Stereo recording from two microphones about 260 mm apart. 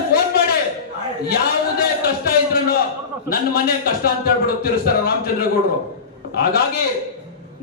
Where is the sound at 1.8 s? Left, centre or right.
Left.